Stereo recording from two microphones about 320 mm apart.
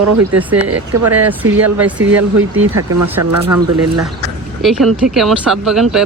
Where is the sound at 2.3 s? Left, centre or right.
Right.